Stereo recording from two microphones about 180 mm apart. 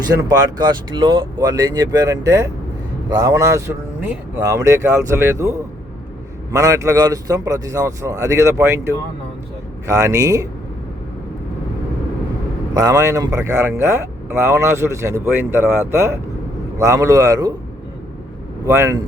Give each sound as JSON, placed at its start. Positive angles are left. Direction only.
{"t": 0.3, "sound": "speech", "side_deg": -25}
{"t": 12.7, "sound": "speech", "side_deg": -20}
{"t": 18.6, "sound": "speech", "side_deg": -15}